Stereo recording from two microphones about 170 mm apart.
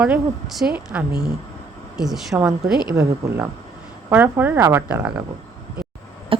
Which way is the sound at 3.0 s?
15° right (ahead or behind).